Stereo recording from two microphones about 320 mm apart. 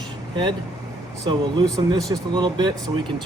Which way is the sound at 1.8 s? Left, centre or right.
Centre.